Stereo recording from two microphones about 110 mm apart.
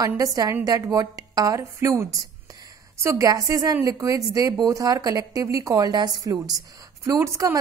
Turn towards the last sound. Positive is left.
turn(degrees=-30)  # may be behind; listen again after turning